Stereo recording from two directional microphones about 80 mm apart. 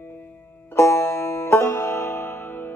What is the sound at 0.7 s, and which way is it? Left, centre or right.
Music, left.